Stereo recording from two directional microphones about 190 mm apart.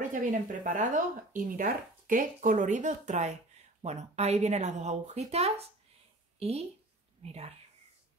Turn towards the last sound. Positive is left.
turn(degrees=-35)  # may be behind; listen again after turning